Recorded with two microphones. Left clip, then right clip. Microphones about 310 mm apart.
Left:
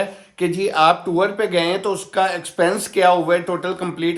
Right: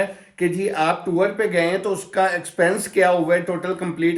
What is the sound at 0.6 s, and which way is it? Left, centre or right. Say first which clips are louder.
Speech: left 8 dB; centre.